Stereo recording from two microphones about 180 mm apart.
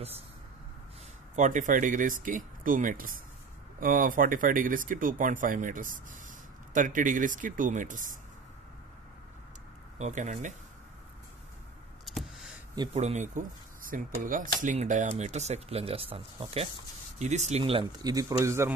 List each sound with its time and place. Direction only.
1.3 s speech: 45° right (ahead or behind)
9.9 s speech: 40° right (ahead or behind)
12.1 s a sound: centre (ahead or behind)
12.9 s speech: 40° right (ahead or behind); by 18.7 s 15° right (ahead or behind)